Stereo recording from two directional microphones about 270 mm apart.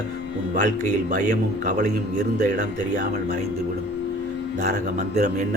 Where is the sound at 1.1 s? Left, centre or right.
Right.